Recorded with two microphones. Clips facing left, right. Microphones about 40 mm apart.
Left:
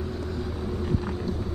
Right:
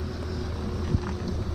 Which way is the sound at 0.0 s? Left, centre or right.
Left.